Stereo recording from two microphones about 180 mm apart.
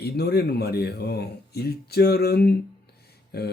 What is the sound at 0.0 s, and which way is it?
Speech, 65° left (ahead or behind).